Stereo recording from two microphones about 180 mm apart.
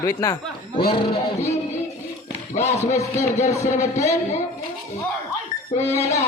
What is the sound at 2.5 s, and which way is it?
Music, 35° left (ahead or behind).